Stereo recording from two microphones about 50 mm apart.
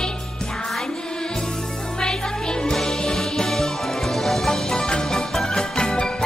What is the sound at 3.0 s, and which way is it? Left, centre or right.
Music, centre.